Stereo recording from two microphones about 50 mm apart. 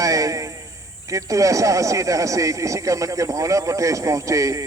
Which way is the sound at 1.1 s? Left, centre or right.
Right.